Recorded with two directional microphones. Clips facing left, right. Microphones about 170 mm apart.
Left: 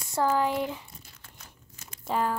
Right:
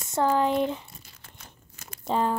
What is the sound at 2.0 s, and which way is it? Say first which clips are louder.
Speech: right 2 dB; 20° right (ahead or behind).